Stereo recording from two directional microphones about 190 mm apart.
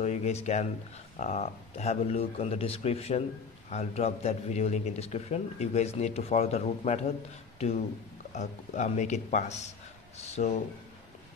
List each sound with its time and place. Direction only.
0.0 s speech: 35° left (ahead or behind)
8.3 s speech: 35° left (ahead or behind)